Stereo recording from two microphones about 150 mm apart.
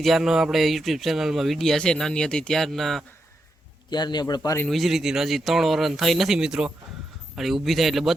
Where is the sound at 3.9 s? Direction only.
30° left (ahead or behind).